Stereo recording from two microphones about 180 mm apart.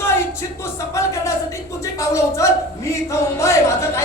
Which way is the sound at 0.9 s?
15° left (ahead or behind).